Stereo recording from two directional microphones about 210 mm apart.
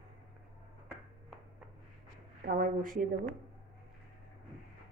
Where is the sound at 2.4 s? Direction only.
45° right (ahead or behind).